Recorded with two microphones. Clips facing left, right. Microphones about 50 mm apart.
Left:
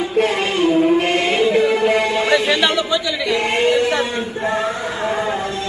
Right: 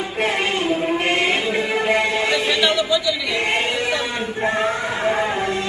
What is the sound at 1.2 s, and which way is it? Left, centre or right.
Music, centre.